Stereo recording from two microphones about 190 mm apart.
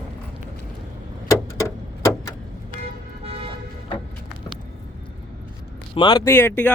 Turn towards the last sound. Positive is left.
turn(degrees=10)  # may be behind; listen again after turning